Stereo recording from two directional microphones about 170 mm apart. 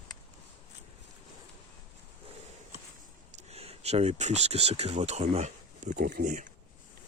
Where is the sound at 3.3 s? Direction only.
40° right (ahead or behind).